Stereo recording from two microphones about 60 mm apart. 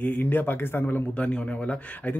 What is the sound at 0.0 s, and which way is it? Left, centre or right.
Speech, left.